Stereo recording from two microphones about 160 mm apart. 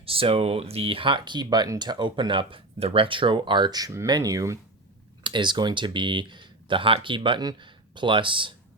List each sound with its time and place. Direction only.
0.0 s speech: 35° right (ahead or behind)